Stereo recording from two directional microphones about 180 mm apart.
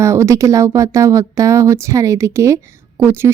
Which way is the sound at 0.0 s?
15° right (ahead or behind).